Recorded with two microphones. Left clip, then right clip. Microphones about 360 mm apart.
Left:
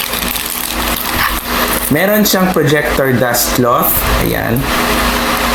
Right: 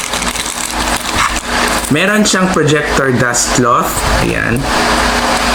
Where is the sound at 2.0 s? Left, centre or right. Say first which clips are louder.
Left 1 dB; centre.